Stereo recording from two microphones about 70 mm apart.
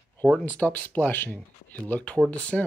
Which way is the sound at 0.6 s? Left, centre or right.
Left.